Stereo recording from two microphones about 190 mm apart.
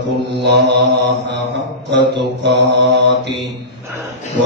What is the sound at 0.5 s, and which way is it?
Mantra, 65° right (ahead or behind).